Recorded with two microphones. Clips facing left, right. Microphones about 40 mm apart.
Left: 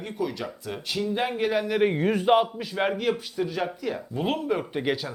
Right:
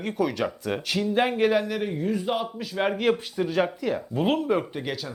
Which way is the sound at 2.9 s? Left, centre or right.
Centre.